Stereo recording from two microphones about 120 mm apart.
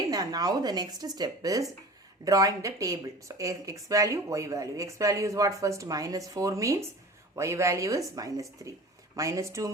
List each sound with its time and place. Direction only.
0.1 s speech: 35° right (ahead or behind)